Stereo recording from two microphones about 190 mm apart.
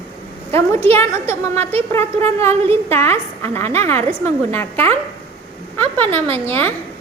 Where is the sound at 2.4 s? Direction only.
30° right (ahead or behind).